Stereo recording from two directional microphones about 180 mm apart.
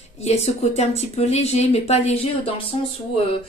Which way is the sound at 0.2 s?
35° left (ahead or behind).